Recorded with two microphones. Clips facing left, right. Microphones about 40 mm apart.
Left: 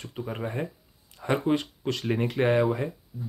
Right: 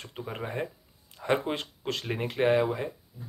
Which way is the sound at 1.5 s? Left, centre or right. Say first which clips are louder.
Left 7 dB; right.